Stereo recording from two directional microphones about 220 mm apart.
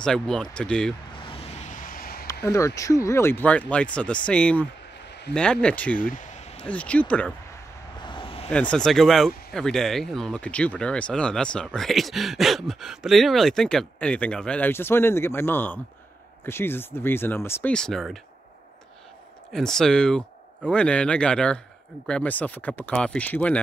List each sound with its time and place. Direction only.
0.0 s speech: 5° left (ahead or behind)
1.2 s vehicle: 25° left (ahead or behind); by 2.2 s 40° left (ahead or behind)
2.4 s speech: 15° left (ahead or behind)
5.9 s a sound: 35° left (ahead or behind)
6.7 s speech: 5° left (ahead or behind)
8.0 s a sound: 20° left (ahead or behind)
8.5 s speech: 5° left (ahead or behind)
19.5 s speech: centre (ahead or behind)